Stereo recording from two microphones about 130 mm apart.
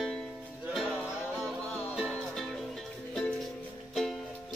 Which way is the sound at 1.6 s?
10° left (ahead or behind).